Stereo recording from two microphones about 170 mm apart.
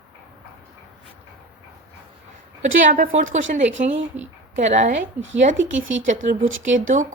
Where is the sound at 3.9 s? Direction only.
90° right.